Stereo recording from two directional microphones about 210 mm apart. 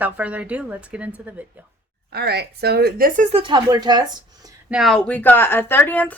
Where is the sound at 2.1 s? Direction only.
50° right (ahead or behind); by 4.1 s 20° right (ahead or behind).